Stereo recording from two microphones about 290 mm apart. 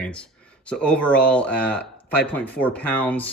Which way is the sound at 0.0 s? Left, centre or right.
Centre.